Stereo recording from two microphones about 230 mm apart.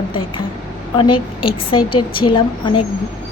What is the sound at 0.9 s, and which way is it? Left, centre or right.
A woman's voice, left.